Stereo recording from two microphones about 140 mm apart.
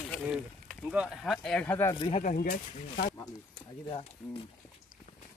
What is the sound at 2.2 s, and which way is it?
Speech, 65° left (ahead or behind).